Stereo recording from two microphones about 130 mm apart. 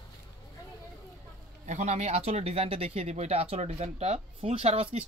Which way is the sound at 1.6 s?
65° right (ahead or behind).